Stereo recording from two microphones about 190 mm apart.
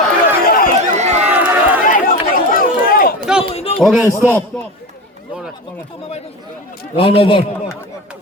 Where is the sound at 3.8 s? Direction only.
Centre (ahead or behind).